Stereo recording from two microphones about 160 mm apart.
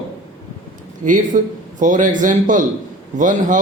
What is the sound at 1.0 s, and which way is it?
Speech, 55° right (ahead or behind).